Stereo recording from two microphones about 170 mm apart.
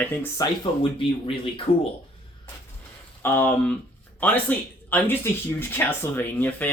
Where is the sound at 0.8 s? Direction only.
30° left (ahead or behind).